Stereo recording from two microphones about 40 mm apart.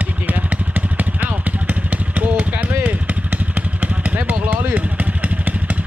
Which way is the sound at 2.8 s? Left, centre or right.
Right.